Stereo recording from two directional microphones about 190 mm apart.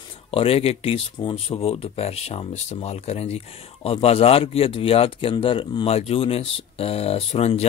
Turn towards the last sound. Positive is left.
turn(degrees=35)  # may be behind; listen again after turning